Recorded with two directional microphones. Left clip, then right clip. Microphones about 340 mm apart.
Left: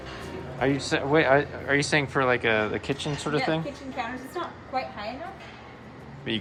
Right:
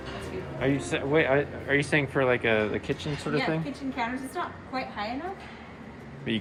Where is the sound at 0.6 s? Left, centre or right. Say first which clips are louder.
Left 3 dB; centre.